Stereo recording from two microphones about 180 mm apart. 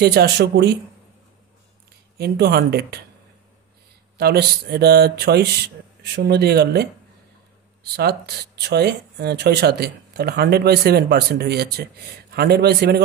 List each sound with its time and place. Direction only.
0.0 s speech: 65° right (ahead or behind)
2.1 s speech: 65° right (ahead or behind)
4.2 s speech: 60° right (ahead or behind)